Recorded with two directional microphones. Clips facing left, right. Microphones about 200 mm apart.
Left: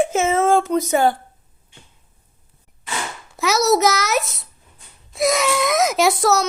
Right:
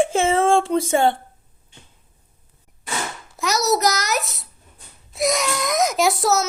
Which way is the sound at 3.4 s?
Centre (ahead or behind).